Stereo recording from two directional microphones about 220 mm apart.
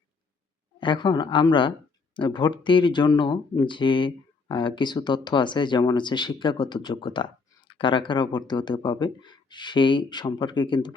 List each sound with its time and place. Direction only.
0.8 s speech: 20° left (ahead or behind)